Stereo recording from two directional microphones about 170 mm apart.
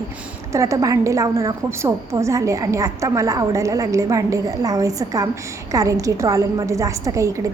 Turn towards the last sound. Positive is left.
turn(degrees=-20)  # may be behind; listen again after turning